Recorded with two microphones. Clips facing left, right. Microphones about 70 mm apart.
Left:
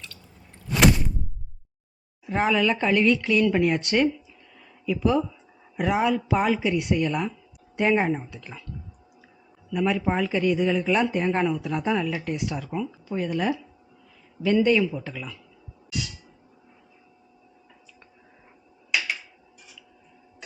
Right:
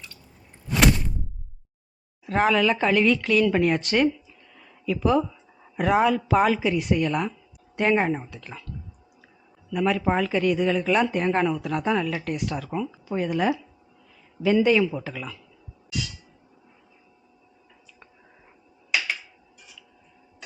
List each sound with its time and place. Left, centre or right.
0.7 s a sound: centre
2.3 s speech: centre
4.5 s a sound: centre
5.7 s speech: centre
9.7 s speech: centre
12.7 s speech: centre
18.9 s finger snapping: centre